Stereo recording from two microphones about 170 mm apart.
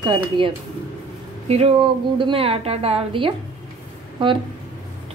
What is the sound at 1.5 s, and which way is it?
Speech, 35° right (ahead or behind).